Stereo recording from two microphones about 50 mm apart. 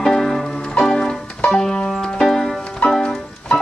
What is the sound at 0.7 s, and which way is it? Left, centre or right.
Music, centre.